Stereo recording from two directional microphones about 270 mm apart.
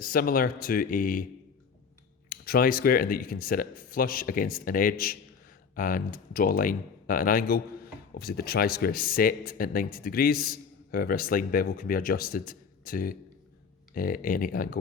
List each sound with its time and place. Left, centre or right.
0.0 s speech: left
2.3 s speech: left